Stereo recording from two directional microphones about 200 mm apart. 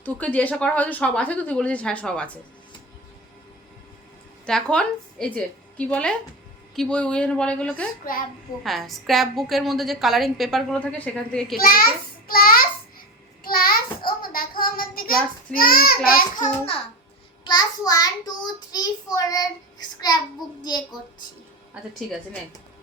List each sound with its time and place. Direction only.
0.0 s speech: 10° left (ahead or behind)
4.4 s a woman's voice: 5° left (ahead or behind)
8.1 s a child's voice: 45° left (ahead or behind)
8.6 s a woman's voice: centre (ahead or behind)
11.5 s a child's voice: 45° left (ahead or behind)
13.4 s child singing: 45° left (ahead or behind)
15.5 s a child's voice: 45° left (ahead or behind)
17.4 s child singing: 20° left (ahead or behind)
18.7 s speech: 20° left (ahead or behind)